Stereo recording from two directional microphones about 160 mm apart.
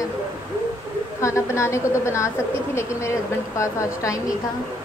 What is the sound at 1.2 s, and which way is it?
A woman's voice, 20° left (ahead or behind).